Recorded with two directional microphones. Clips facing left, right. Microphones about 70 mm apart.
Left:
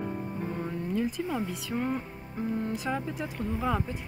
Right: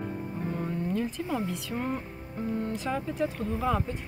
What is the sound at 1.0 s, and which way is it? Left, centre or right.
Speech, centre.